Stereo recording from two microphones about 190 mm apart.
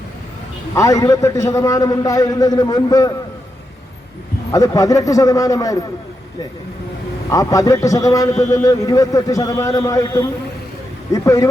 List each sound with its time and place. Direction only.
0.8 s a man's voice: 20° left (ahead or behind)
4.5 s a man's voice: 20° left (ahead or behind)
7.3 s a man's voice: 20° left (ahead or behind)